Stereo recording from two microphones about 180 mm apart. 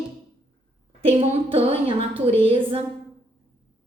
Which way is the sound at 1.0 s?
35° right (ahead or behind).